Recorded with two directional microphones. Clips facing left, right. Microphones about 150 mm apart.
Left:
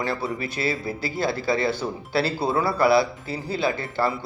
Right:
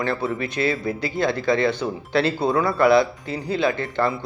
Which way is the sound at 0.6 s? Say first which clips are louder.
Right 4 dB; 25° left (ahead or behind).